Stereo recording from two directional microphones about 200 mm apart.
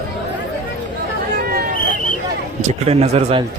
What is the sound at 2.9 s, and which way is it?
Speech, 30° right (ahead or behind).